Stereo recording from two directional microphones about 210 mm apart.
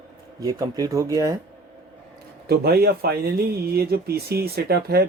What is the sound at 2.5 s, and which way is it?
Speech, 50° right (ahead or behind).